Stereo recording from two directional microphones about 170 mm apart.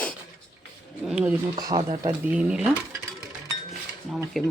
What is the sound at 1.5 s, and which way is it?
Speech, 25° right (ahead or behind).